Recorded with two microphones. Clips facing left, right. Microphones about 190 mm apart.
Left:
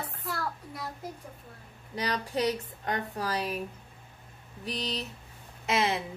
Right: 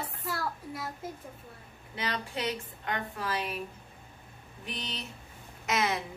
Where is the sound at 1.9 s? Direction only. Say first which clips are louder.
Left 4 dB; 40° left (ahead or behind).